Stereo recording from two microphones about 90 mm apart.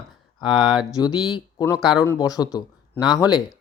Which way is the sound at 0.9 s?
50° left (ahead or behind).